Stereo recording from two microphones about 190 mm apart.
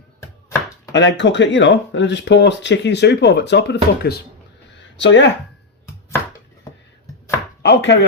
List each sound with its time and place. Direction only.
0.9 s speech: 70° left (ahead or behind)
4.9 s speech: 70° left (ahead or behind)
7.6 s chopping: 65° left (ahead or behind)